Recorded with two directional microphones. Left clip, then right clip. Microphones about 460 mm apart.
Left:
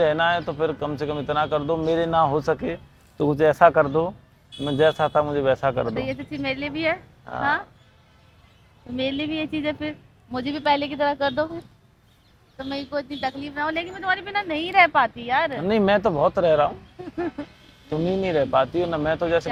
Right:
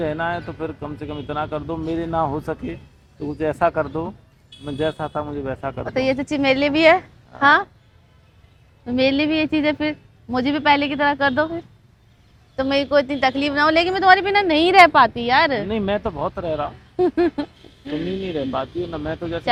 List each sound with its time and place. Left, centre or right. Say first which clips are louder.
0.0 s a man's voice: left 4 dB; left
5.9 s a woman's voice: right 8 dB; right
9.0 s a woman's voice: right 8 dB; centre
12.5 s a woman's voice: right 11 dB; right; by 15.6 s centre
15.7 s speech: left 4 dB; left
18.2 s speech: left 8 dB; left